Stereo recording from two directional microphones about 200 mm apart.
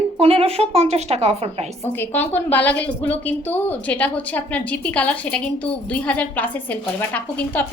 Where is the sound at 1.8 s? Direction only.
10° left (ahead or behind).